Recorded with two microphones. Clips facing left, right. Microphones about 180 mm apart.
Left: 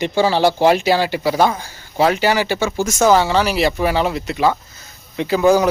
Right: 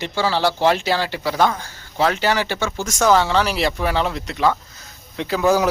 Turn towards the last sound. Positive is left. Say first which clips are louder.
# left 4 dB
turn(degrees=0)  # may be behind; listen again after turning